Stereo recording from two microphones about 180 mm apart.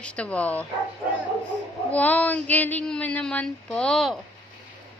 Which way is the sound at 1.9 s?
10° left (ahead or behind).